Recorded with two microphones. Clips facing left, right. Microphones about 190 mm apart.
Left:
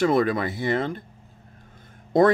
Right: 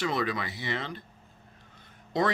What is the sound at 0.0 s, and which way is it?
Speech, 50° left (ahead or behind).